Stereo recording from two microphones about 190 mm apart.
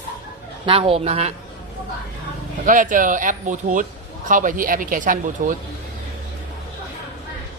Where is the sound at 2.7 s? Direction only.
45° right (ahead or behind).